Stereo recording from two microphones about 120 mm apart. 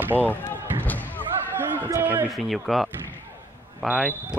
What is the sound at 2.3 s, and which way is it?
Speech, centre (ahead or behind).